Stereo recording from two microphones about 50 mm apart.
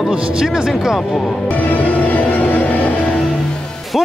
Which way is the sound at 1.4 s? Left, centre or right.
Left.